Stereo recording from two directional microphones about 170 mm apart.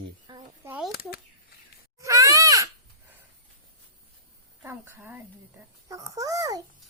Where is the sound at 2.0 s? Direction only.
20° right (ahead or behind).